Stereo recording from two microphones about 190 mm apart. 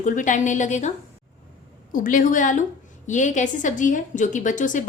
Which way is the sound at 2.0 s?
45° left (ahead or behind).